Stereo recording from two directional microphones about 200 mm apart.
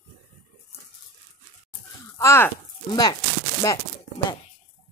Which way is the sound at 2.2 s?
15° left (ahead or behind).